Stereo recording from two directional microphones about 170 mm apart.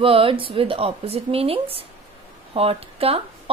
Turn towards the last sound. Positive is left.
turn(degrees=-35)  # may be behind; listen again after turning